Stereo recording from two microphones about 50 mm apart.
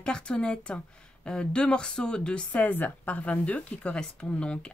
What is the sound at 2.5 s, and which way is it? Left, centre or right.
Speech, left.